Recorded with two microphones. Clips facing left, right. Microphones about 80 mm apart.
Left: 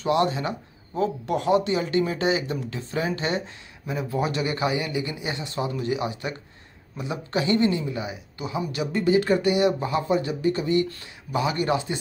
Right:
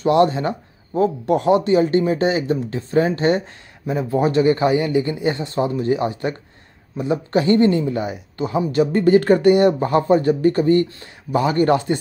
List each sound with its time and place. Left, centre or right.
0.0 s speech: right